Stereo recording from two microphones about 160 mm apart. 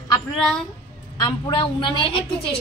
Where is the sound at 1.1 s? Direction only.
25° left (ahead or behind).